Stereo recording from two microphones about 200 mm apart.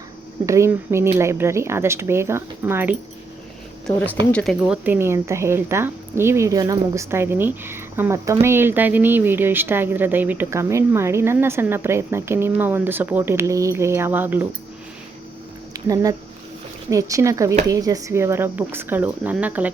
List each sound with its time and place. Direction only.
0.4 s a woman's voice: 15° right (ahead or behind)
3.8 s speech: 10° left (ahead or behind)
4.7 s a woman's voice: 10° right (ahead or behind)
15.7 s a woman's voice: 15° right (ahead or behind)